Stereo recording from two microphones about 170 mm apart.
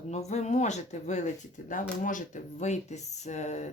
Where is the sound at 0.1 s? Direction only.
40° left (ahead or behind).